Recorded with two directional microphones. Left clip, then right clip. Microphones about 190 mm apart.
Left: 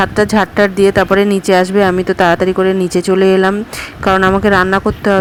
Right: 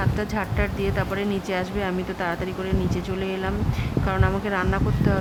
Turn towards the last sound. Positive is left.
turn(degrees=30)  # may be behind; listen again after turning